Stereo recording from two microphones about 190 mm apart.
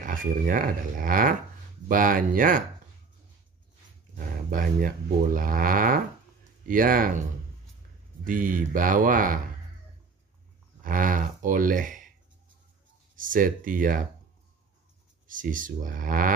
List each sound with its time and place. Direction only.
0.0 s speech: 45° right (ahead or behind)
4.5 s speech: 45° right (ahead or behind)
8.3 s speech: 45° right (ahead or behind)
10.8 s speech: 45° right (ahead or behind)
13.1 s speech: 45° right (ahead or behind)
15.2 s speech: 45° right (ahead or behind)